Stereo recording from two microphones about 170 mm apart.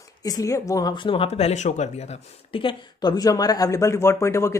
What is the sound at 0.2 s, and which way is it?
Speech, 20° left (ahead or behind).